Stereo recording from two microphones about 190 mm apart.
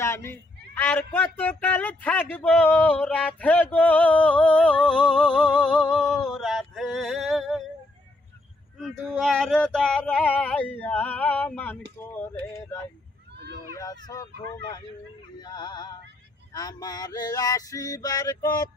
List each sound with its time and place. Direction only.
0.0 s speech: 15° left (ahead or behind)
8.8 s a sound: centre (ahead or behind)
13.7 s male singing: 20° left (ahead or behind)